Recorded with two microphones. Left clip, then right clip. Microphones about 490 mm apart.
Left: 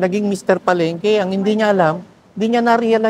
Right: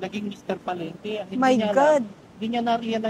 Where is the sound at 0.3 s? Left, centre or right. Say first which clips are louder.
Left 14 dB; left.